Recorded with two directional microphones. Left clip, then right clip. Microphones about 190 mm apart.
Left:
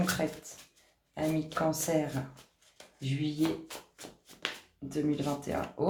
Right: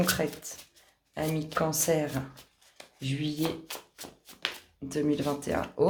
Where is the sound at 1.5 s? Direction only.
50° right (ahead or behind).